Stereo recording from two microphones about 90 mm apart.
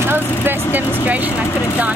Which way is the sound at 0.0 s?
25° right (ahead or behind).